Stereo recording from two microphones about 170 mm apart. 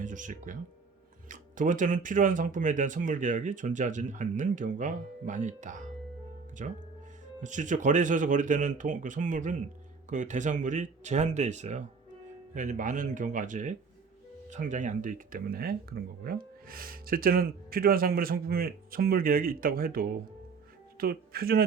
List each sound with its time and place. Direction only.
0.0 s speech: 50° right (ahead or behind)